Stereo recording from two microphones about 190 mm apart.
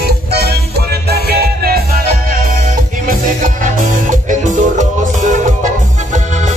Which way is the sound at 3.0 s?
45° right (ahead or behind).